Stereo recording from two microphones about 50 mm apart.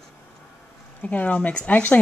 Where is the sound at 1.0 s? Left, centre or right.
Left.